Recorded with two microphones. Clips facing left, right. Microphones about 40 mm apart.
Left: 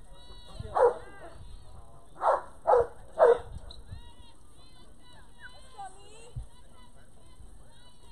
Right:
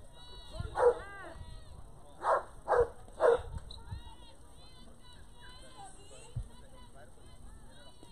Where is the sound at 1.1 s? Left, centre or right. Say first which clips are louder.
Right 1 dB; centre.